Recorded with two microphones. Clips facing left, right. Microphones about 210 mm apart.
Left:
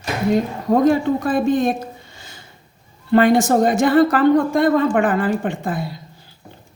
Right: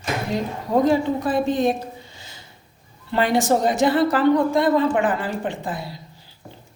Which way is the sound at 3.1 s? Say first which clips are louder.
Left 5 dB; 50° left (ahead or behind).